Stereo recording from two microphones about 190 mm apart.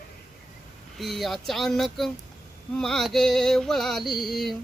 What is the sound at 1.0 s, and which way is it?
Music, centre (ahead or behind).